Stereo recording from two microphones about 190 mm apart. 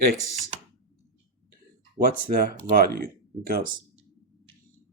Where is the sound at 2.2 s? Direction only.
50° right (ahead or behind).